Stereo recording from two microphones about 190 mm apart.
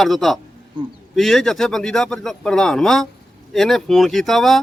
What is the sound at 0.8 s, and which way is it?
Speech, 25° right (ahead or behind).